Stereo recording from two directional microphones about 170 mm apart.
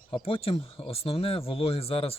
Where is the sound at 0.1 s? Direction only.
35° left (ahead or behind).